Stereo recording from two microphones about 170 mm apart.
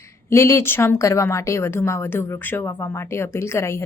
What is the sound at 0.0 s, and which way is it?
A woman's voice, 15° left (ahead or behind).